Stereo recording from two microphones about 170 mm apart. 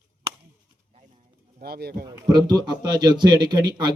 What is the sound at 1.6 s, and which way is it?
Speech, 65° right (ahead or behind).